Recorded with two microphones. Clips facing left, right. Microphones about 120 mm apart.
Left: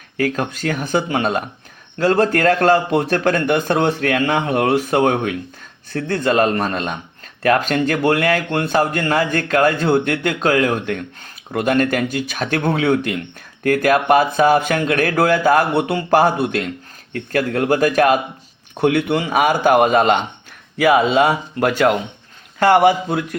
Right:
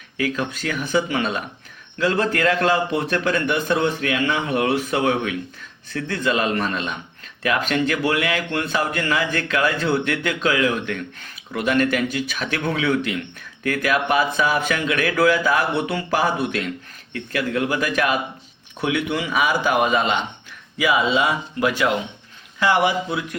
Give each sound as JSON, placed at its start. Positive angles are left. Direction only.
{"t": 0.2, "sound": "speech", "side_deg": 45}